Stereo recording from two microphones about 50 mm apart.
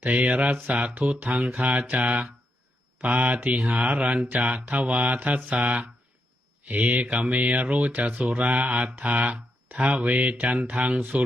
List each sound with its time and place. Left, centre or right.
0.0 s speech: right